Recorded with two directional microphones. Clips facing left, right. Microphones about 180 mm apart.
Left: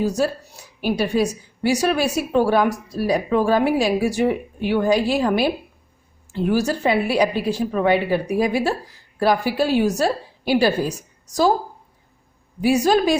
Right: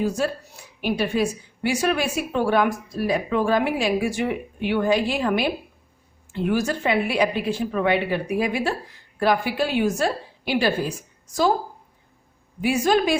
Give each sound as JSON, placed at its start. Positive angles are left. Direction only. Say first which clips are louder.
{"t": 0.0, "sound": "a woman's voice", "louder": "left 3 dB", "side_deg": 40}
{"t": 12.6, "sound": "a woman's voice", "louder": "left 3 dB", "side_deg": 40}